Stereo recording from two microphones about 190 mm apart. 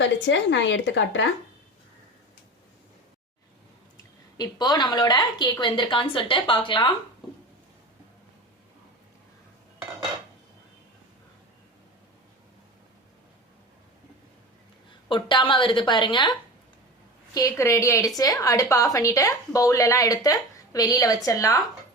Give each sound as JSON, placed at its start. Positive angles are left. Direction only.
{"t": 0.0, "sound": "speech", "side_deg": 75}
{"t": 4.4, "sound": "a woman's voice", "side_deg": 20}
{"t": 15.1, "sound": "a woman's voice", "side_deg": 25}